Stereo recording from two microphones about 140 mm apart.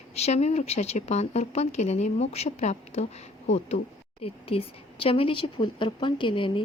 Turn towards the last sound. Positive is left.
turn(degrees=35)  # may be behind; listen again after turning